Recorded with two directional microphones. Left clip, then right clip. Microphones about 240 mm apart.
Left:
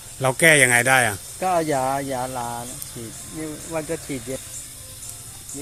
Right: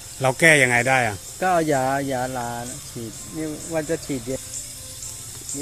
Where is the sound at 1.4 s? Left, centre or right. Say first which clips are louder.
Right 1 dB; right.